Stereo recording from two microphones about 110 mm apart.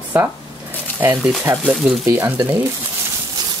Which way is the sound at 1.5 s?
25° right (ahead or behind).